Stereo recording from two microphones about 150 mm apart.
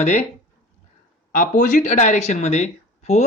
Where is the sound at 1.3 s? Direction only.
55° left (ahead or behind).